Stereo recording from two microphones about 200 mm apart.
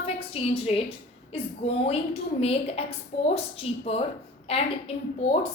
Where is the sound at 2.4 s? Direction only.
30° left (ahead or behind).